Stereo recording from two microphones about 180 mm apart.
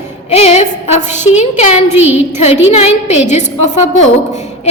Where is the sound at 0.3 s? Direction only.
35° left (ahead or behind).